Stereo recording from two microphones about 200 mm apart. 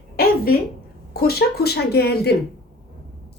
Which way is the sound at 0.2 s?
50° left (ahead or behind).